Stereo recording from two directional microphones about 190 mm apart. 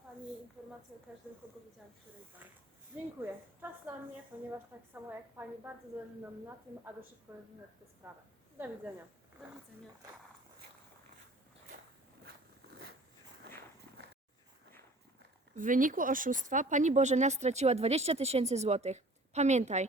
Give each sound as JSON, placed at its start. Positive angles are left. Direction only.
{"t": 3.2, "sound": "a woman's voice", "side_deg": -10}
{"t": 8.5, "sound": "a woman's voice", "side_deg": -10}
{"t": 15.5, "sound": "speech", "side_deg": -45}